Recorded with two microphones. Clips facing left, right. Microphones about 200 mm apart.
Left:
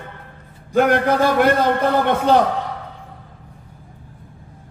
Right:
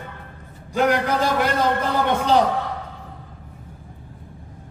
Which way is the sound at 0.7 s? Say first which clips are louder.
Left 4 dB; 55° left (ahead or behind).